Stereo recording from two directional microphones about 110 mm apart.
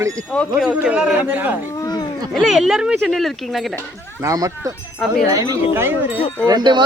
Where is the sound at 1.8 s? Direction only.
40° left (ahead or behind).